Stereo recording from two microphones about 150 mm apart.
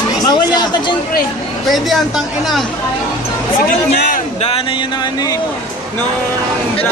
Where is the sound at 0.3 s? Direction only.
30° left (ahead or behind).